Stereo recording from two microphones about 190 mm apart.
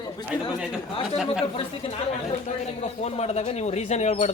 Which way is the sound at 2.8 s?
35° left (ahead or behind).